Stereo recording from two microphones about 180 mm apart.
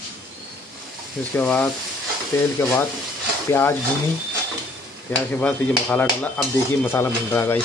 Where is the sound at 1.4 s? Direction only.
10° left (ahead or behind).